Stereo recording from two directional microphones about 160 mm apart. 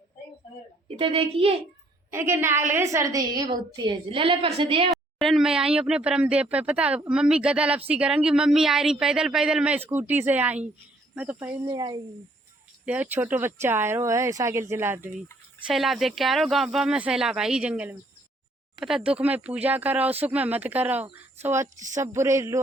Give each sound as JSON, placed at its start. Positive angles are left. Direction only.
{"t": 0.9, "sound": "a child's voice", "side_deg": -35}
{"t": 2.0, "sound": "a woman's voice", "side_deg": -15}
{"t": 4.9, "sound": "speech", "side_deg": 0}
{"t": 11.6, "sound": "a woman's voice", "side_deg": -25}
{"t": 12.8, "sound": "speech", "side_deg": -10}
{"t": 15.6, "sound": "speech", "side_deg": 0}